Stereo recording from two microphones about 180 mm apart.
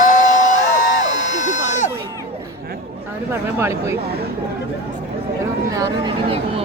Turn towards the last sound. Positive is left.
turn(degrees=-20)  # may be behind; listen again after turning